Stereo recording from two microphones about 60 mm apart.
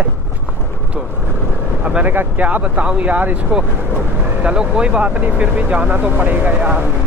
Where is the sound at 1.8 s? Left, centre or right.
Right.